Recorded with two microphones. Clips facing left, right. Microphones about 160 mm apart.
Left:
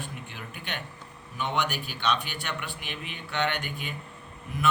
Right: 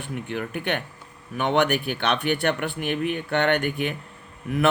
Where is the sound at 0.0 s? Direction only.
55° right (ahead or behind).